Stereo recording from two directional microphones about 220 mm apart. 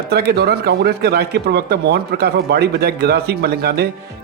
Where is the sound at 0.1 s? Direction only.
45° right (ahead or behind).